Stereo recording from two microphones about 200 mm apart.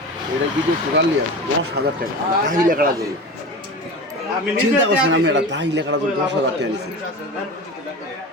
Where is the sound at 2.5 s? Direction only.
40° right (ahead or behind).